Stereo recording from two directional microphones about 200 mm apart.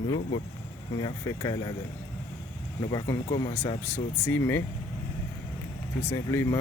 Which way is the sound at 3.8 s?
10° left (ahead or behind).